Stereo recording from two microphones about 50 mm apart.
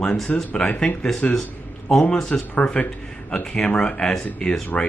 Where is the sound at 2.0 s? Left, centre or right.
Left.